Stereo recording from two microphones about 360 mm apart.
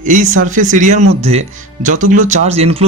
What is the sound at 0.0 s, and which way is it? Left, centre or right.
Speech, right.